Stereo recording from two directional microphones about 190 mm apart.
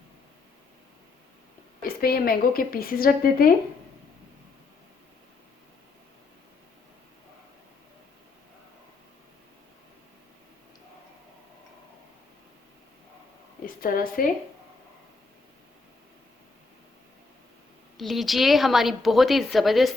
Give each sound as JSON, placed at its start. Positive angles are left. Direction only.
{"t": 1.8, "sound": "a woman's voice", "side_deg": 50}
{"t": 13.8, "sound": "a woman's voice", "side_deg": 50}
{"t": 17.9, "sound": "a woman's voice", "side_deg": 0}